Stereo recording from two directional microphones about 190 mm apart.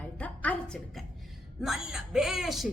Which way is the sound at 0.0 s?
10° left (ahead or behind).